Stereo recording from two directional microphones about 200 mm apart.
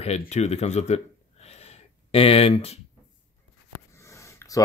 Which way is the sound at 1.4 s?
30° left (ahead or behind).